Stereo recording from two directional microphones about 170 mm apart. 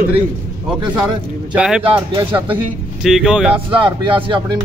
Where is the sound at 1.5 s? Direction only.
5° right (ahead or behind).